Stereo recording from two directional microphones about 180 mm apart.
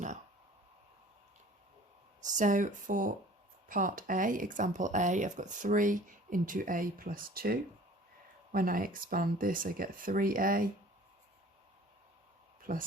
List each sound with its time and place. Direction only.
2.2 s speech: 45° right (ahead or behind)
12.7 s speech: 50° right (ahead or behind)